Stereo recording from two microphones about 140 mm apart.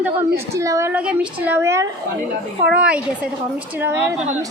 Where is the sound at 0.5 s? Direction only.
20° right (ahead or behind).